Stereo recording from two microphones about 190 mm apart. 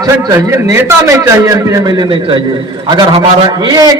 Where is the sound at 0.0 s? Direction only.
20° right (ahead or behind).